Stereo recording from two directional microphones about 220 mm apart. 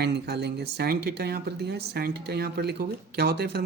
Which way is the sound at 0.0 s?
50° right (ahead or behind).